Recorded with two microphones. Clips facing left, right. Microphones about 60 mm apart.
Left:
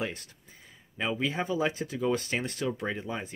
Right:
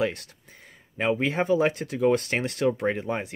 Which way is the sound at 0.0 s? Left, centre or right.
Right.